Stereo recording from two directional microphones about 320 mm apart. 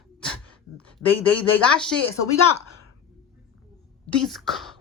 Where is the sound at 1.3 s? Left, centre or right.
Centre.